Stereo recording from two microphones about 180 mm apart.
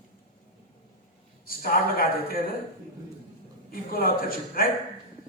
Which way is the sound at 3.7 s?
55° left (ahead or behind).